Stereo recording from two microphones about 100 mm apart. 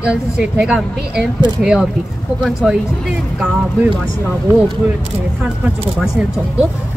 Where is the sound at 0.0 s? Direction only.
10° right (ahead or behind).